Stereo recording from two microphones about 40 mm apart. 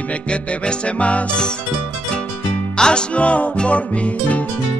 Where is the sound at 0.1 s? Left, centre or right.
Left.